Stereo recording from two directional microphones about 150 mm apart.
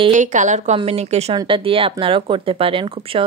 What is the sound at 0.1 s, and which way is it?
Speech, 55° right (ahead or behind).